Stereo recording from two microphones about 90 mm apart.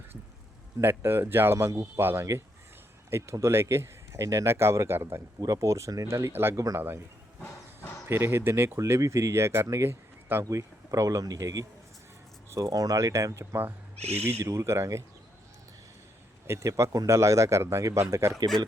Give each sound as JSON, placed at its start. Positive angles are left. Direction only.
{"t": 0.8, "sound": "speech", "side_deg": -25}
{"t": 8.0, "sound": "speech", "side_deg": -30}
{"t": 8.8, "sound": "speech", "side_deg": -35}
{"t": 16.5, "sound": "speech", "side_deg": -35}
{"t": 18.3, "sound": "speech", "side_deg": -50}